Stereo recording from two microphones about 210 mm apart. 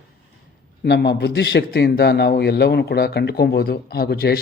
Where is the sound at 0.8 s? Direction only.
55° left (ahead or behind).